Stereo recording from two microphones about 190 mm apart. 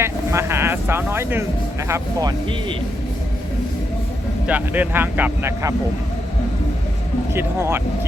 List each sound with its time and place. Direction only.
0.0 s speech: 15° right (ahead or behind)
4.4 s speech: 10° right (ahead or behind)
7.3 s speech: 10° right (ahead or behind)